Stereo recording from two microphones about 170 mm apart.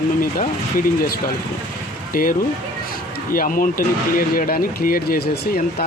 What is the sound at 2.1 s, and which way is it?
Speech, 55° left (ahead or behind).